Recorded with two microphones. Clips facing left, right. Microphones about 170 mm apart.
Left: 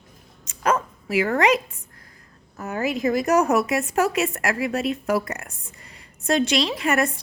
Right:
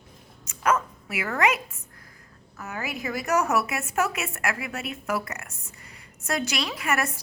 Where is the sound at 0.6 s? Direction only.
30° left (ahead or behind).